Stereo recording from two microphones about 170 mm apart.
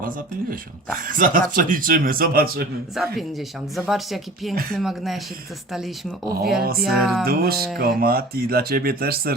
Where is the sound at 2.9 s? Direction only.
Centre (ahead or behind).